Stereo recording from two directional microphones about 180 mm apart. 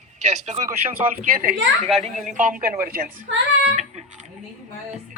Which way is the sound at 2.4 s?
50° right (ahead or behind).